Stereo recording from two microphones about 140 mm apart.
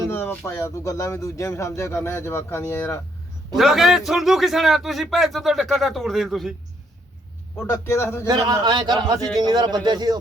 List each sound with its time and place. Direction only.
0.1 s speech: 15° left (ahead or behind)
3.5 s a man's voice: centre (ahead or behind)
7.5 s speech: 20° left (ahead or behind)
8.3 s a man's voice: 30° right (ahead or behind)